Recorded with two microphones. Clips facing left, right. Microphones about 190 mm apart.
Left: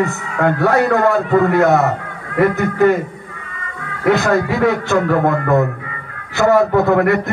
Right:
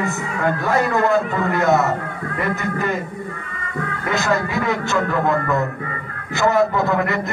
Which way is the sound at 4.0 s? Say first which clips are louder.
Left 7 dB; 65° left (ahead or behind).